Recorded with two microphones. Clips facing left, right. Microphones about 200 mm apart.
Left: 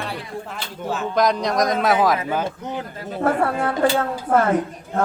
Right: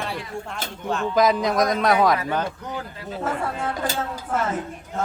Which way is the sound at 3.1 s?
60° left (ahead or behind).